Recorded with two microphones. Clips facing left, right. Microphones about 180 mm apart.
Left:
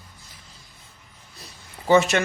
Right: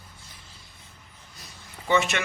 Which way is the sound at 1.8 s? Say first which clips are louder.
Left 6 dB; 40° left (ahead or behind).